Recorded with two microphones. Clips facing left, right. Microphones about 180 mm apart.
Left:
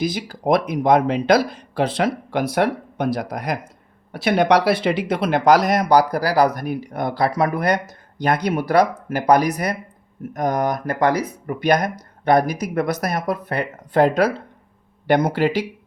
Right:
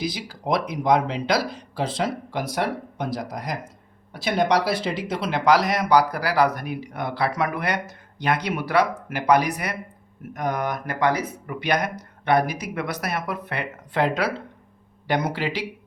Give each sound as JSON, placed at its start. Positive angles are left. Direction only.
{"t": 0.0, "sound": "speech", "side_deg": 50}